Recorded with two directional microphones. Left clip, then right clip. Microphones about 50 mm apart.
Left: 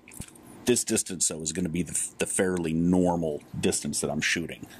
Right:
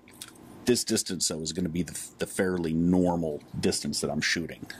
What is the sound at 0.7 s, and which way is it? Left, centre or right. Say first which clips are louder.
Speech: even; left.